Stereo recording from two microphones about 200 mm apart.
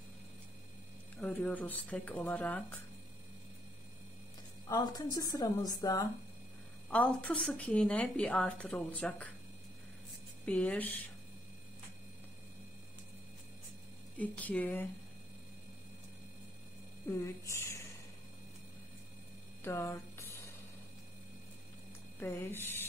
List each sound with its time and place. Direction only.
1.1 s a woman's voice: 10° left (ahead or behind)
4.6 s a woman's voice: 20° left (ahead or behind)
6.9 s a woman's voice: 5° left (ahead or behind)
10.4 s a woman's voice: 5° left (ahead or behind)
14.1 s a woman's voice: 5° left (ahead or behind)
17.1 s a woman's voice: 15° left (ahead or behind)
19.6 s a sound: 15° left (ahead or behind)
22.2 s a woman's voice: 10° left (ahead or behind)